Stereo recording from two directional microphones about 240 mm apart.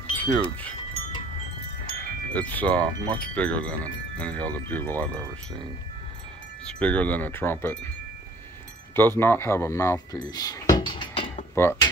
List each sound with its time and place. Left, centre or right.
0.1 s wind chime: centre
2.0 s wind chime: centre
6.6 s speech: centre
8.9 s speech: centre
11.5 s speech: centre